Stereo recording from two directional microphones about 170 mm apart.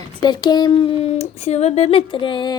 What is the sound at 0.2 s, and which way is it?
Speech, 25° left (ahead or behind).